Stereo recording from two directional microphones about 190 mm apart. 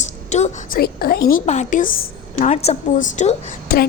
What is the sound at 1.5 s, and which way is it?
A woman's voice, 40° left (ahead or behind).